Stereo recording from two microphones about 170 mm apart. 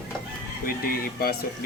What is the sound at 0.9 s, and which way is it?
Speech, 65° left (ahead or behind).